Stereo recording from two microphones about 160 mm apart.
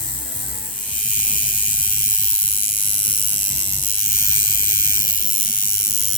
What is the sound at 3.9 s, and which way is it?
Electric shaver, 65° left (ahead or behind).